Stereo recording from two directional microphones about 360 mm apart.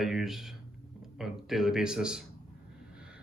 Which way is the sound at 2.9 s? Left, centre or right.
Centre.